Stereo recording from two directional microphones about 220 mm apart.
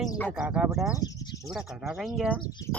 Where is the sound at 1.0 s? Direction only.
15° left (ahead or behind).